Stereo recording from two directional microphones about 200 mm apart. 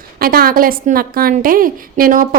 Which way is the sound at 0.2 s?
45° right (ahead or behind).